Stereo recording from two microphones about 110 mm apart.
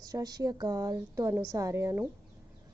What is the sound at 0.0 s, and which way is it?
A woman's voice, 35° right (ahead or behind).